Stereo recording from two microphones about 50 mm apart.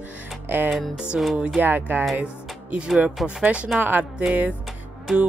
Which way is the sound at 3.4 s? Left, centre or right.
Right.